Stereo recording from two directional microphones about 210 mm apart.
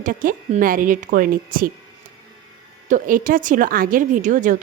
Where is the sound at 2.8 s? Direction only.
40° right (ahead or behind).